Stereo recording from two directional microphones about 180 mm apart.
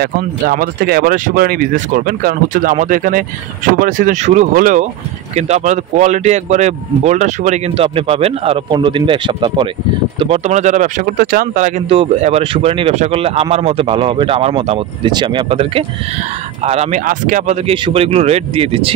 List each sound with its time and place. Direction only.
0.0 s speech: 55° right (ahead or behind)
11.9 s speech: 35° right (ahead or behind)
17.0 s speech: 45° right (ahead or behind)
17.6 s speech: 30° right (ahead or behind)